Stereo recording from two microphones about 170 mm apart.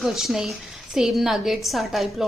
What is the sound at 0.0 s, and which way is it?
A woman's voice, centre (ahead or behind).